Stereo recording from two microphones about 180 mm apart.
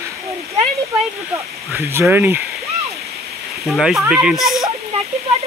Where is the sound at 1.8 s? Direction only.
15° right (ahead or behind).